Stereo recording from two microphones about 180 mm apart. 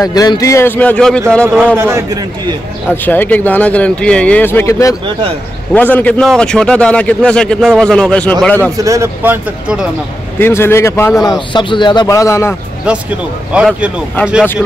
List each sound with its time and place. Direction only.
0.0 s speech: 20° left (ahead or behind); by 1.2 s 5° left (ahead or behind)
1.8 s speech: 15° right (ahead or behind)
2.9 s a man's voice: 10° left (ahead or behind)
8.8 s speech: 15° right (ahead or behind)
10.4 s speech: 15° left (ahead or behind)
11.2 s speech: 25° left (ahead or behind)
13.5 s speech: 5° right (ahead or behind)